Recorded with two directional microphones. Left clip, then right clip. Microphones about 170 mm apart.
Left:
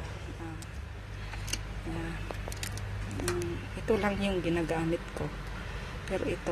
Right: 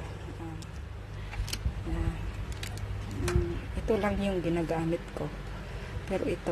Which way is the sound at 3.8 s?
15° right (ahead or behind).